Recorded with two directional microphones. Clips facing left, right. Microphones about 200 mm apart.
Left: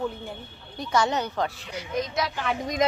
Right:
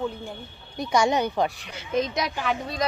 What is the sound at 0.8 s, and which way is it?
Speech, 10° right (ahead or behind).